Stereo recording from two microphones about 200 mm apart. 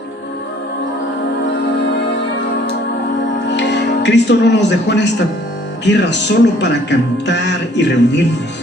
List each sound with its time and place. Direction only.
3.5 s speech: 60° left (ahead or behind)